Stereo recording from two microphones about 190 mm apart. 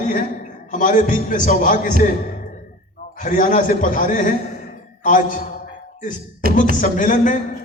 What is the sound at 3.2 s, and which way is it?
A man's voice, 45° left (ahead or behind).